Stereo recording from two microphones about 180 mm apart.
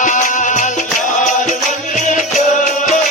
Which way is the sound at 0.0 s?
45° left (ahead or behind).